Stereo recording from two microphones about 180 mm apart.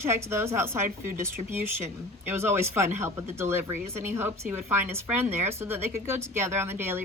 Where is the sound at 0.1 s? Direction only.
15° right (ahead or behind).